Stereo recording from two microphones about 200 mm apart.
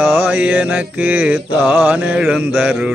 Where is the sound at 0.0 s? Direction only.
10° right (ahead or behind).